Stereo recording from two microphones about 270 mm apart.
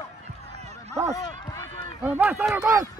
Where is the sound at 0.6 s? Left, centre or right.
Right.